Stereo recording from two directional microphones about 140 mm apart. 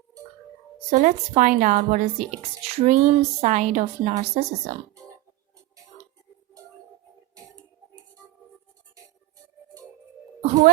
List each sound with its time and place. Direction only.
0.9 s a woman's voice: 55° right (ahead or behind)
2.6 s a woman's voice: 50° right (ahead or behind)